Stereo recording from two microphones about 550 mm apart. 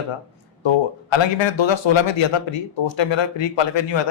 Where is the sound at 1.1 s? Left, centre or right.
Left.